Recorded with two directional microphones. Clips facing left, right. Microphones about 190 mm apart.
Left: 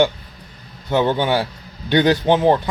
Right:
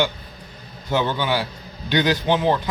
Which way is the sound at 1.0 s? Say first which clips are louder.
Left 5 dB; 30° left (ahead or behind).